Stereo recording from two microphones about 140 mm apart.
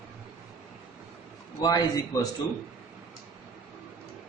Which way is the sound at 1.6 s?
30° left (ahead or behind).